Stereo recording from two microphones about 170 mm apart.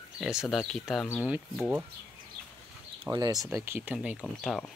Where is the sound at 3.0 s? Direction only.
20° right (ahead or behind); by 4.6 s 5° right (ahead or behind).